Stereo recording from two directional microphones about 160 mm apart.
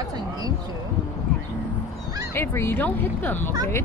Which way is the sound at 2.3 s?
15° left (ahead or behind).